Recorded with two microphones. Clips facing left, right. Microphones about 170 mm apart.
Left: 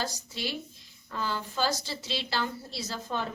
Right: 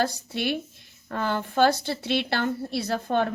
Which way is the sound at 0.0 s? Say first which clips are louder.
Right 8 dB; 60° right (ahead or behind).